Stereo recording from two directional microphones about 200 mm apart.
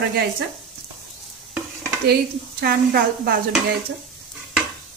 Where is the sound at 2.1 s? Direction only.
50° right (ahead or behind).